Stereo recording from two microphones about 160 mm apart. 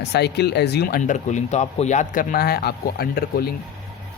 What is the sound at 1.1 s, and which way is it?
Speech, 45° left (ahead or behind).